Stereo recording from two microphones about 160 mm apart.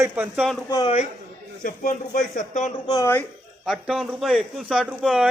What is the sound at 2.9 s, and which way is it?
Speech, 15° left (ahead or behind).